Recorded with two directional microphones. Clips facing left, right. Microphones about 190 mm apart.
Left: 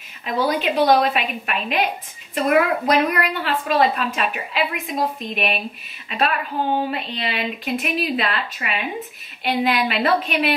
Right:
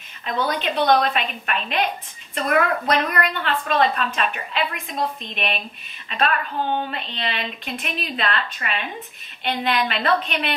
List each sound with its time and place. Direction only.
0.3 s a woman's voice: 5° left (ahead or behind)